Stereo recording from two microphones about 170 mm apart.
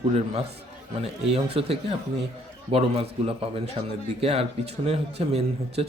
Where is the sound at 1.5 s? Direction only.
35° right (ahead or behind).